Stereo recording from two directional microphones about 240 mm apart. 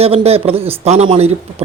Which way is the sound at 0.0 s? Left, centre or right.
Right.